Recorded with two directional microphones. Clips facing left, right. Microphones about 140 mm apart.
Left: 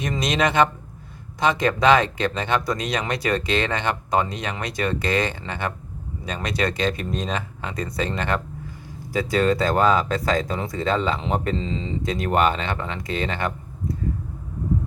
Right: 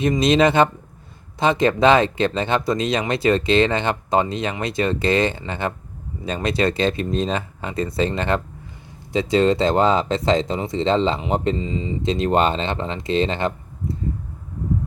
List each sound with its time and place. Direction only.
0.2 s speech: 30° right (ahead or behind)
11.6 s speech: 10° right (ahead or behind)
12.0 s speech: 25° right (ahead or behind)